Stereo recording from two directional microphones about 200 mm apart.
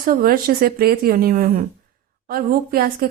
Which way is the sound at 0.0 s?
45° right (ahead or behind).